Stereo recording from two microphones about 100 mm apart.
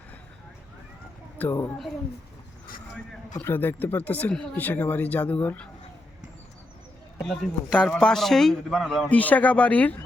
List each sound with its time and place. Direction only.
1.4 s a woman's voice: 20° left (ahead or behind)
3.4 s speech: 20° left (ahead or behind)
7.8 s a man's voice: 10° left (ahead or behind)
9.0 s speech: 15° left (ahead or behind)